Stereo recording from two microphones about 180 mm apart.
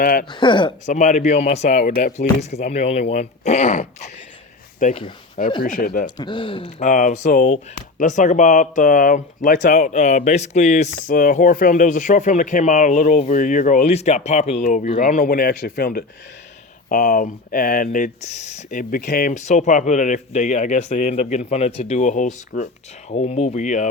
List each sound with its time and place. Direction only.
0.0 s speech: 50° left (ahead or behind)
0.3 s speech: 25° left (ahead or behind)
0.9 s speech: 40° left (ahead or behind)
6.1 s speech: 25° left (ahead or behind)
6.8 s speech: 45° left (ahead or behind)